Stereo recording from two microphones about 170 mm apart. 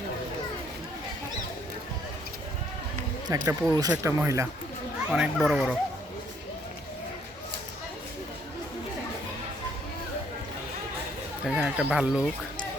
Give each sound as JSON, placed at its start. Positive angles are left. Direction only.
{"t": 3.2, "sound": "speech", "side_deg": -20}
{"t": 5.1, "sound": "speech", "side_deg": 0}
{"t": 11.4, "sound": "speech", "side_deg": -5}